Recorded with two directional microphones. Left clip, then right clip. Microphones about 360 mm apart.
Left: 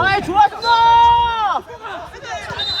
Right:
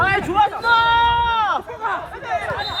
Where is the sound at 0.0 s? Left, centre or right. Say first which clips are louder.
Left 3 dB; left.